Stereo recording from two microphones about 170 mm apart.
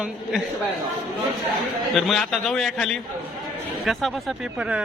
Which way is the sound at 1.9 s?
Centre (ahead or behind).